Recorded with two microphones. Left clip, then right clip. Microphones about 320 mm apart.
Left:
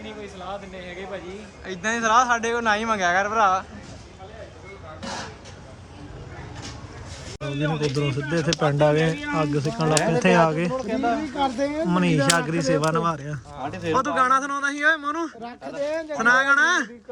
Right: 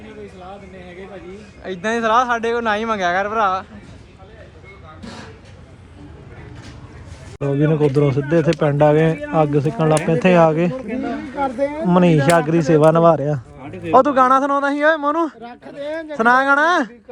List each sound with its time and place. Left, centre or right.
1.6 s speech: centre
7.4 s speech: centre
15.4 s speech: centre
16.1 s speech: centre